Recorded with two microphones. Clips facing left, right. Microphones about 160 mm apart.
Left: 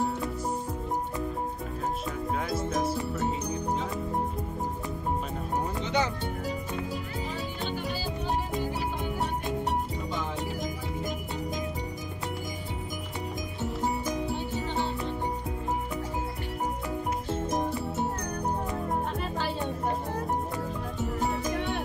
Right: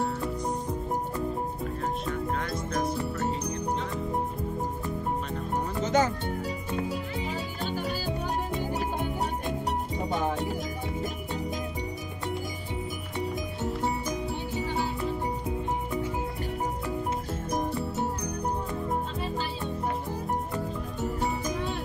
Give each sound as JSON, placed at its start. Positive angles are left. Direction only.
{"t": 2.5, "sound": "music", "side_deg": 5}
{"t": 5.8, "sound": "music", "side_deg": -45}
{"t": 14.3, "sound": "music", "side_deg": -5}
{"t": 21.3, "sound": "music", "side_deg": 65}